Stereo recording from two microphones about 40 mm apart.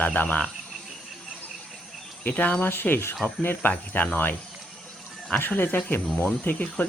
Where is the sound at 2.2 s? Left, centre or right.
Left.